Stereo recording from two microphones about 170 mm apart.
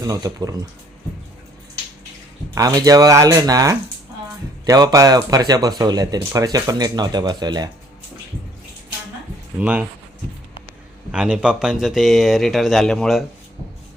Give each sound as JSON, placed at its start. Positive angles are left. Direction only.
{"t": 0.0, "sound": "speech", "side_deg": -20}
{"t": 2.6, "sound": "speech", "side_deg": -20}
{"t": 9.6, "sound": "speech", "side_deg": -5}
{"t": 11.1, "sound": "speech", "side_deg": -5}